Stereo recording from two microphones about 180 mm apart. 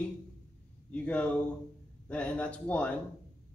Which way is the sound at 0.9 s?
5° left (ahead or behind).